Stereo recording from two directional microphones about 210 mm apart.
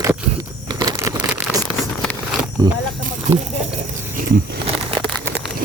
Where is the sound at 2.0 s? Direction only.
Centre (ahead or behind).